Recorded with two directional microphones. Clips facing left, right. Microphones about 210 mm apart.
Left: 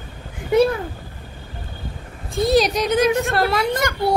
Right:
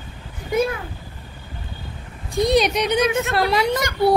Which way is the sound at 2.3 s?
Centre (ahead or behind).